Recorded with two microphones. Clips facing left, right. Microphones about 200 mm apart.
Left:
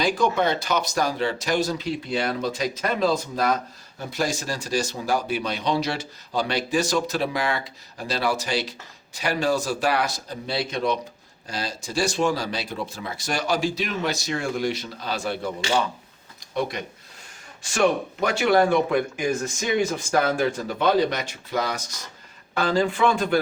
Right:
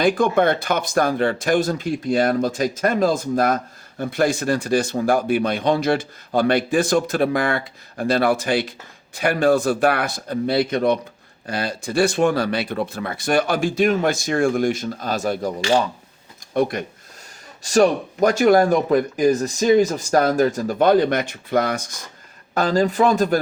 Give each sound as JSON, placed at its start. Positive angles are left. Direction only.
{"t": 0.0, "sound": "speech", "side_deg": -55}
{"t": 16.6, "sound": "speech", "side_deg": -50}
{"t": 17.6, "sound": "speech", "side_deg": -40}
{"t": 22.5, "sound": "speech", "side_deg": -40}